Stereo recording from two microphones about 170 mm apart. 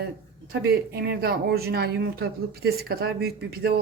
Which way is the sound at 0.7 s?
70° right (ahead or behind).